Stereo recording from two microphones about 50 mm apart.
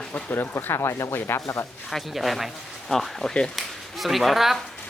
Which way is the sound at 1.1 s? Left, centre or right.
Left.